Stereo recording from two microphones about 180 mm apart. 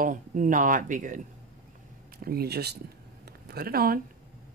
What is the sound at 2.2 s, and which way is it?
Speech, 60° right (ahead or behind).